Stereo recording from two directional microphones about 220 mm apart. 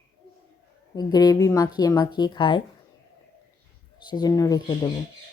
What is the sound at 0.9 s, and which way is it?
A woman's voice, 20° left (ahead or behind).